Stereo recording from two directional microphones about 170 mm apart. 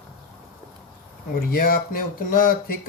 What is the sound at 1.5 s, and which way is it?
Speech, 60° left (ahead or behind).